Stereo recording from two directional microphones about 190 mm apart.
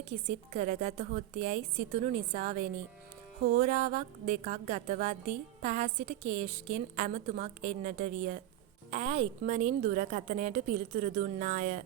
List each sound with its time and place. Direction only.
0.1 s a woman's voice: 40° right (ahead or behind)